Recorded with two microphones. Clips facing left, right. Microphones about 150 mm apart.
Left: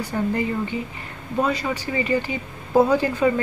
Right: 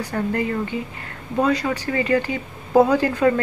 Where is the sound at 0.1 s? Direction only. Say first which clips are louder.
Even; 10° left (ahead or behind).